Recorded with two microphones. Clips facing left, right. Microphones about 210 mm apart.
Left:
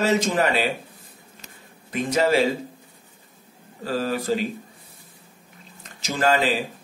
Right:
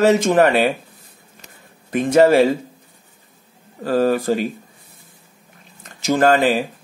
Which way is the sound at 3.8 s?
55° right (ahead or behind).